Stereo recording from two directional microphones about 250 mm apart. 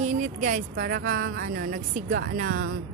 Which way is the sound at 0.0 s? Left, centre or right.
Right.